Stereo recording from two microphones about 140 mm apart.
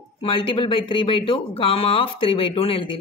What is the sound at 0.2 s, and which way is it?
A man's voice, 40° left (ahead or behind).